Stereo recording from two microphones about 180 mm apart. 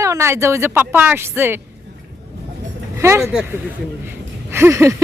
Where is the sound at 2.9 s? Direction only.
15° right (ahead or behind).